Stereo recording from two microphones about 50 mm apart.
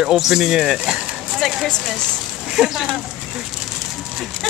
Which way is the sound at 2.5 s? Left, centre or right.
Centre.